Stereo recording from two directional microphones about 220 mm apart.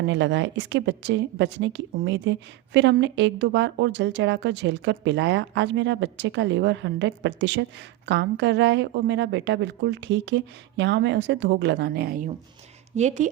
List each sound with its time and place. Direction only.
0.0 s a woman's voice: 55° right (ahead or behind); by 13.2 s 35° right (ahead or behind)